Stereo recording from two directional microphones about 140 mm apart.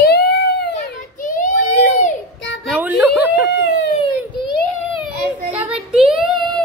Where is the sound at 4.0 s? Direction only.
35° left (ahead or behind).